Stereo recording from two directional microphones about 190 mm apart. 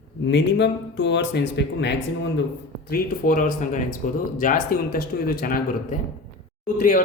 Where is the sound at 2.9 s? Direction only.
50° left (ahead or behind).